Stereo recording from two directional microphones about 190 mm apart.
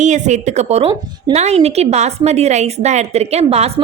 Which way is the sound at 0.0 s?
40° right (ahead or behind).